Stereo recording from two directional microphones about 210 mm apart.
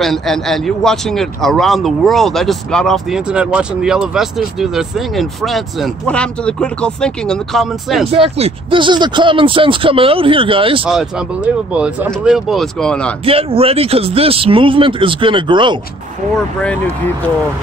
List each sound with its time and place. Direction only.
0.0 s speech: centre (ahead or behind)
8.1 s speech: 30° right (ahead or behind)
10.9 s speech: centre (ahead or behind)
13.2 s speech: 25° right (ahead or behind)